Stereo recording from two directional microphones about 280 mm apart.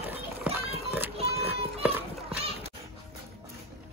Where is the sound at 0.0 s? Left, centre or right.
Centre.